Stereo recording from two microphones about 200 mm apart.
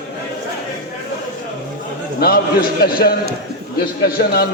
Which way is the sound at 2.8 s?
50° left (ahead or behind).